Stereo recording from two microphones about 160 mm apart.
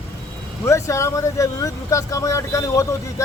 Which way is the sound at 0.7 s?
20° left (ahead or behind).